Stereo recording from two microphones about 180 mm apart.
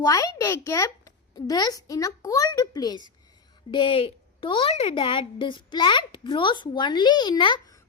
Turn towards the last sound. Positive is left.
turn(degrees=25)  # may be behind; listen again after turning